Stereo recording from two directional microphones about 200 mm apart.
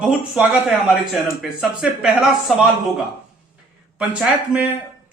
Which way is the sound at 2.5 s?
Centre (ahead or behind).